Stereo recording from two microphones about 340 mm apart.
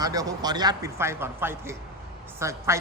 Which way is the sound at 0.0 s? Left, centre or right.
Centre.